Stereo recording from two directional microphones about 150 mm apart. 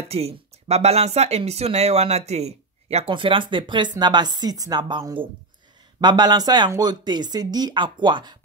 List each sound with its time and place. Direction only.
0.1 s speech: 40° right (ahead or behind)